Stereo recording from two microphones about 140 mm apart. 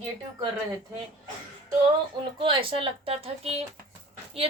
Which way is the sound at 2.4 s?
40° right (ahead or behind).